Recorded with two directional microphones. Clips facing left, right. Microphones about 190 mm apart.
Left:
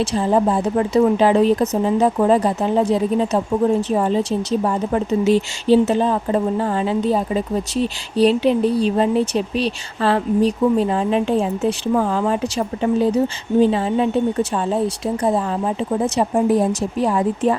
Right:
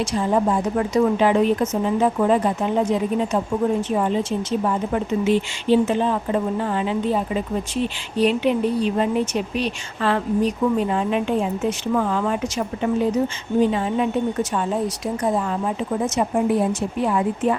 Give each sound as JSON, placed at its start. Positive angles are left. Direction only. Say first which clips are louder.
{"t": 0.0, "sound": "speech", "louder": "left 3 dB", "side_deg": 30}